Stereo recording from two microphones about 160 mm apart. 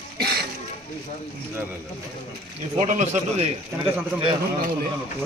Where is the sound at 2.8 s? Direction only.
45° right (ahead or behind).